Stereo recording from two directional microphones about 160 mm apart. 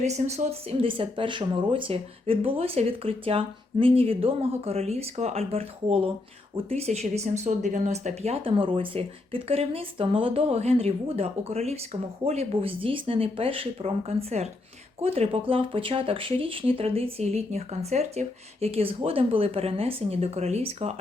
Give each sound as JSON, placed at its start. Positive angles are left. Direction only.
{"t": 0.0, "sound": "speech", "side_deg": -45}